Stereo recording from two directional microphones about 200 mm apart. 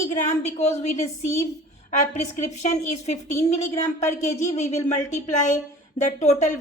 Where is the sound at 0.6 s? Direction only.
35° left (ahead or behind).